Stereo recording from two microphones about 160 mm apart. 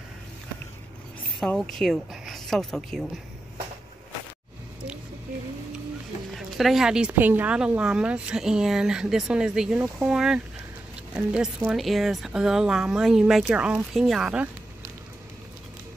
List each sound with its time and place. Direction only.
1.4 s speech: 5° left (ahead or behind)
6.3 s speech: centre (ahead or behind)